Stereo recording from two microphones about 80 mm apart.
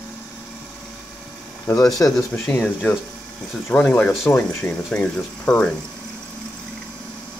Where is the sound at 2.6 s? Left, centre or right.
Centre.